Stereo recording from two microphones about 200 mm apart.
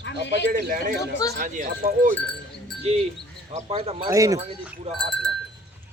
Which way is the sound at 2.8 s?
30° right (ahead or behind).